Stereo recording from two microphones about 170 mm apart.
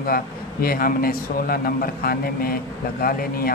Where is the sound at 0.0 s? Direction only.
60° left (ahead or behind).